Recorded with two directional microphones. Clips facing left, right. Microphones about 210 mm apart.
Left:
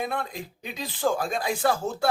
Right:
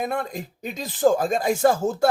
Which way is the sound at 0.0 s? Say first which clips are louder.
Right 4 dB; 45° right (ahead or behind).